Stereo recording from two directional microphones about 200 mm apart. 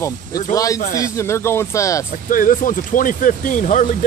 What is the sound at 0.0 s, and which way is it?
Speech, 15° left (ahead or behind).